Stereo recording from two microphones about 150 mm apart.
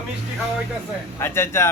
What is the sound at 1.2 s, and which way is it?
Speech, 15° left (ahead or behind).